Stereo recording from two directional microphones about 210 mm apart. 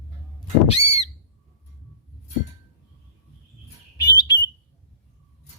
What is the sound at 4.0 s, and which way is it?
Bird, 20° left (ahead or behind).